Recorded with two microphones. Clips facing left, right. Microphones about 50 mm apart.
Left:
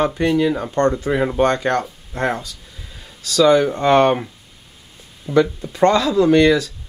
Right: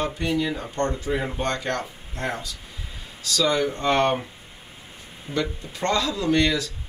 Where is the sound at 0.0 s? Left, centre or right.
Left.